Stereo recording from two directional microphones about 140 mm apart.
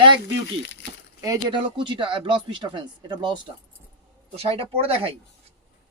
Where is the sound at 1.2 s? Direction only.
25° right (ahead or behind).